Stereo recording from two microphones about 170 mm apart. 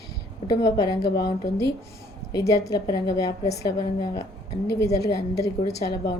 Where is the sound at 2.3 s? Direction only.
20° left (ahead or behind).